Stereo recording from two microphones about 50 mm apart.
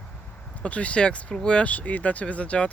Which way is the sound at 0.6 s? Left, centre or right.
Left.